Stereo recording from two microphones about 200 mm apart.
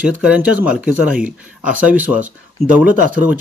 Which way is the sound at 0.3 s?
5° right (ahead or behind).